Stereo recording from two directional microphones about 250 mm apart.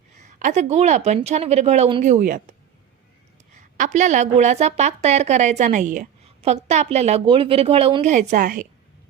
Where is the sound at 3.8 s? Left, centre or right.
Right.